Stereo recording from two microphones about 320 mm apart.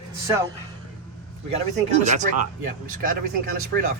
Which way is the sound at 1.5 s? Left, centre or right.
Right.